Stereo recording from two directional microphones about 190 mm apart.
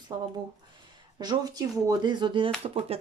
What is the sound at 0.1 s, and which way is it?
Speech, 25° right (ahead or behind).